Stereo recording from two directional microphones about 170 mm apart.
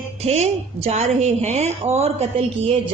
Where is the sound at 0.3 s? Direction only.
40° right (ahead or behind).